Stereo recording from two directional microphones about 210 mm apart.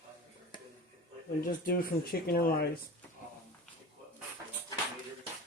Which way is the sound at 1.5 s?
45° left (ahead or behind).